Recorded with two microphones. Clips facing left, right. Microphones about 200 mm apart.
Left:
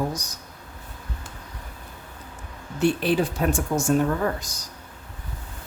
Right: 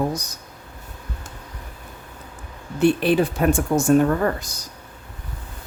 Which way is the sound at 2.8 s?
60° right (ahead or behind).